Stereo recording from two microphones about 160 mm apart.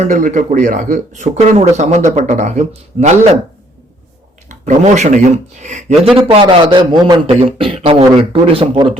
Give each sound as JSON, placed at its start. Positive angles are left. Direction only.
{"t": 0.0, "sound": "speech", "side_deg": -50}
{"t": 4.4, "sound": "speech", "side_deg": -50}
{"t": 6.1, "sound": "a man's voice", "side_deg": -30}